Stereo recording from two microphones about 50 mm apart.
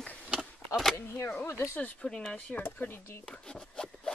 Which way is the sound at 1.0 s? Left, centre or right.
Left.